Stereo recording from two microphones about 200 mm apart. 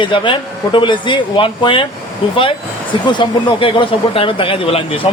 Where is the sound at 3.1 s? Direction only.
25° left (ahead or behind).